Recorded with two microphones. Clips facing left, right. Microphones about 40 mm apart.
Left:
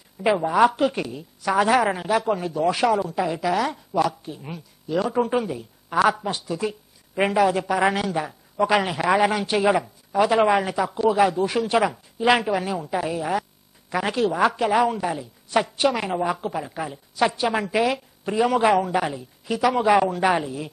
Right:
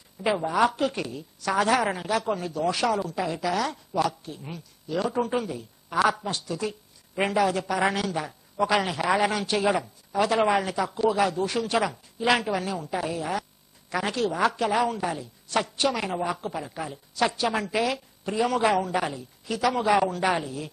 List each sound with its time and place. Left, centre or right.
0.2 s speech: centre